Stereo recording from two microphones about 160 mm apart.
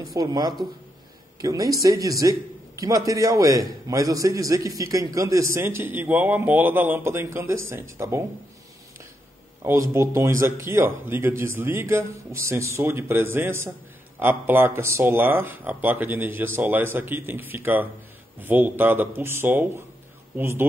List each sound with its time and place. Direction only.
0.1 s a man's voice: 25° right (ahead or behind)
9.6 s a man's voice: 20° right (ahead or behind)